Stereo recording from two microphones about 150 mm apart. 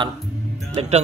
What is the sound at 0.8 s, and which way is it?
Speech, 45° right (ahead or behind).